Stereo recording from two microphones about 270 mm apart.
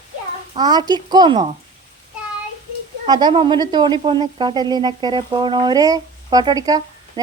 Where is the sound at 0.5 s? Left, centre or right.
Centre.